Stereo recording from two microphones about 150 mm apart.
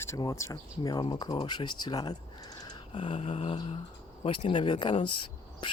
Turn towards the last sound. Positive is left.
turn(degrees=35)  # may be behind; listen again after turning